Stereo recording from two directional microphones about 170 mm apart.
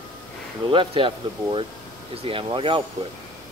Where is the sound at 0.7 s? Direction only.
30° right (ahead or behind).